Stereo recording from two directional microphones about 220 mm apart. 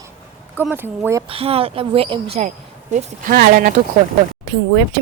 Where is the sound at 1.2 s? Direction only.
25° right (ahead or behind); by 3.7 s 40° right (ahead or behind).